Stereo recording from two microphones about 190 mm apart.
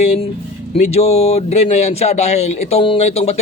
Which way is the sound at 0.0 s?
35° left (ahead or behind).